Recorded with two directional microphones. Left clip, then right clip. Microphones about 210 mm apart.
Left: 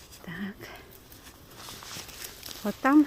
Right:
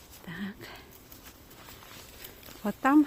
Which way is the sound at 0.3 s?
5° right (ahead or behind).